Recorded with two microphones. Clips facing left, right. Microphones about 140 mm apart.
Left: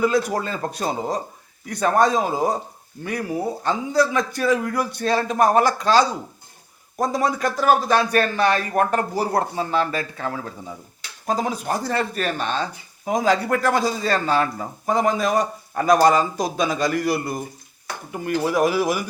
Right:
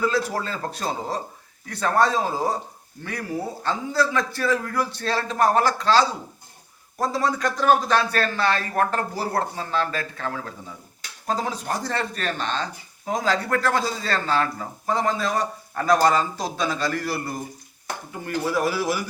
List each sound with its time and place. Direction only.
0.0 s speech: 15° left (ahead or behind)